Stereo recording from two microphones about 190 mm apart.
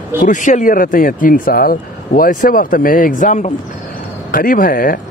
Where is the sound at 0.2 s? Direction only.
40° left (ahead or behind).